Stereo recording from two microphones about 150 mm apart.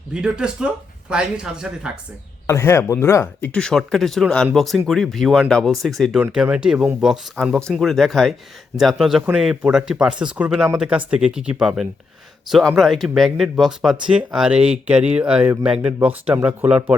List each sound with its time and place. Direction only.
0.1 s speech: 5° right (ahead or behind)
2.5 s speech: 15° left (ahead or behind)
3.5 s speech: 5° left (ahead or behind)